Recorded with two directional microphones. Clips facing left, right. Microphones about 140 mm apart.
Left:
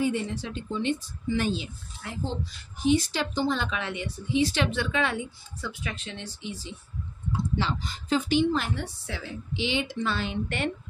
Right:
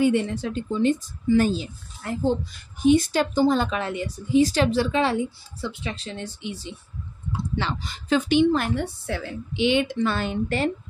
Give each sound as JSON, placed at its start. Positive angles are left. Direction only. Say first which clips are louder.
{"t": 0.0, "sound": "a woman's voice", "louder": "right 6 dB", "side_deg": -65}
{"t": 2.8, "sound": "a woman's voice", "louder": "right 6 dB", "side_deg": -55}
{"t": 6.2, "sound": "a woman's voice", "louder": "right 4 dB", "side_deg": -60}